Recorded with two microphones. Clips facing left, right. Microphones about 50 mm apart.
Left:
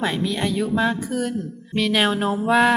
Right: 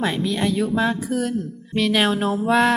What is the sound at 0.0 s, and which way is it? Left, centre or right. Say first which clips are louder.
A woman's voice: right 1 dB; centre.